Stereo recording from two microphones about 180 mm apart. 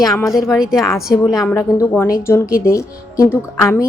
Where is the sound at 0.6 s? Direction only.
5° right (ahead or behind).